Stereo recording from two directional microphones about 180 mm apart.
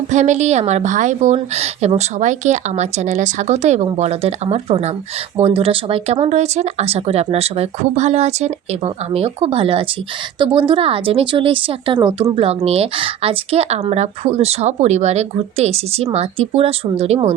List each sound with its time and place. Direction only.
0.1 s speech: 40° right (ahead or behind)